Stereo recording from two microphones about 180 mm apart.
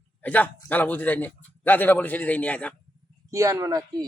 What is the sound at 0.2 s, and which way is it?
A man's voice, 10° left (ahead or behind).